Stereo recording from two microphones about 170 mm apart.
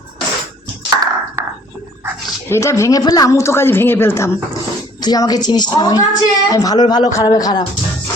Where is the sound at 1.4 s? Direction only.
15° right (ahead or behind).